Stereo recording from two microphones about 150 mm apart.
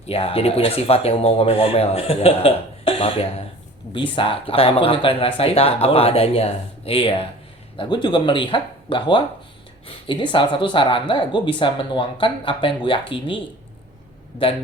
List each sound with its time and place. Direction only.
0.1 s speech: 40° left (ahead or behind)